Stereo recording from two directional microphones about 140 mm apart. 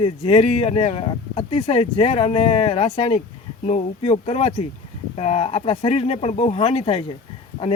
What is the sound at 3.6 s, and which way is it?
Speech, 50° left (ahead or behind).